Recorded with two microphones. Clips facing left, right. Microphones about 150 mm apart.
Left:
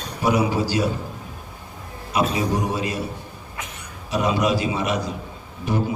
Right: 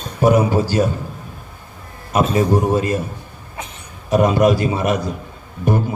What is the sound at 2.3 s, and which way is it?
Speech, 50° right (ahead or behind).